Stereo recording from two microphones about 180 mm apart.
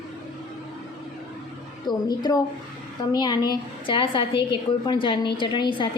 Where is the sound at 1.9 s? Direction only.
25° left (ahead or behind).